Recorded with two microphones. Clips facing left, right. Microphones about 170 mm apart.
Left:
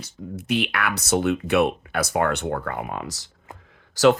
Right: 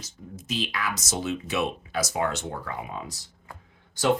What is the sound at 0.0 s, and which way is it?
Speech, 60° left (ahead or behind).